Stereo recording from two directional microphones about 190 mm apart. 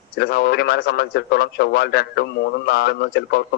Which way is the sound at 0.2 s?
60° left (ahead or behind).